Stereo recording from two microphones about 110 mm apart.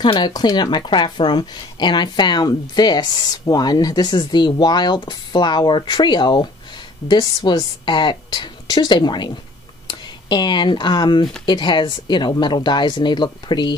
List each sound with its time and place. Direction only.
0.0 s speech: 40° left (ahead or behind)